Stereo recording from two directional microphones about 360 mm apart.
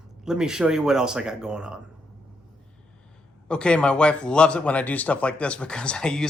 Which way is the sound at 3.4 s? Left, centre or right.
Centre.